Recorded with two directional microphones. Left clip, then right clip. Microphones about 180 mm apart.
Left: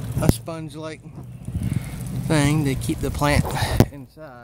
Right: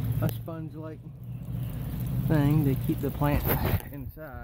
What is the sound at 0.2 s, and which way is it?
Speech, 25° left (ahead or behind).